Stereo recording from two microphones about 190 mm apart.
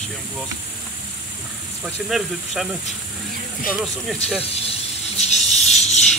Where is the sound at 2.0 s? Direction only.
Centre (ahead or behind).